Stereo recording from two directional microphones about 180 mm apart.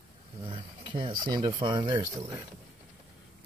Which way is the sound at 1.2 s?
25° right (ahead or behind).